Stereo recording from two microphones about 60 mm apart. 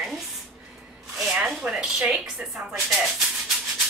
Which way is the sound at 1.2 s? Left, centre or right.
Centre.